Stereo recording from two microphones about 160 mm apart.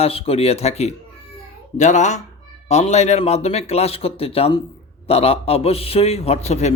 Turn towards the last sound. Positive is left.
turn(degrees=45)  # may be behind; listen again after turning